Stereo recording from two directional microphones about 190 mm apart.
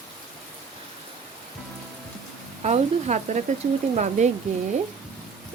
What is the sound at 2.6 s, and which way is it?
Speech, 35° right (ahead or behind).